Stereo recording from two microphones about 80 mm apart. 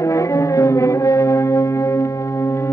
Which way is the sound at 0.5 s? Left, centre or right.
Left.